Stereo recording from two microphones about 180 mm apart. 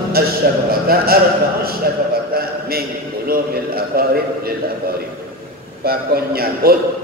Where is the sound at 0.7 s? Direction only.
55° right (ahead or behind).